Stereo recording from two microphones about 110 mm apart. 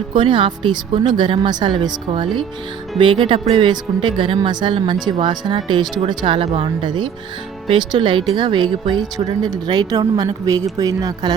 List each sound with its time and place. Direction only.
0.1 s speech: 50° right (ahead or behind)
6.8 s speech: 45° right (ahead or behind)